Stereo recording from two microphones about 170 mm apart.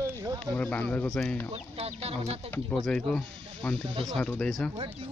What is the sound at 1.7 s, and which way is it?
Speech, 35° right (ahead or behind).